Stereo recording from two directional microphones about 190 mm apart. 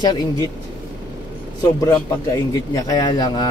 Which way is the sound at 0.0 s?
20° left (ahead or behind).